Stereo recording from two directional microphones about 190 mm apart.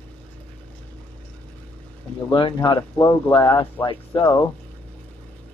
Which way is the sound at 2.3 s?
25° left (ahead or behind).